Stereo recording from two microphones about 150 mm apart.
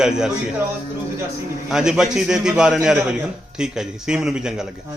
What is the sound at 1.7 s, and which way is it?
A man's voice, 5° right (ahead or behind).